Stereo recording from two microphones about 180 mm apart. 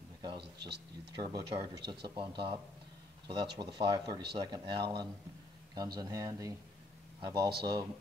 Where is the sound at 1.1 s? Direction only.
25° right (ahead or behind).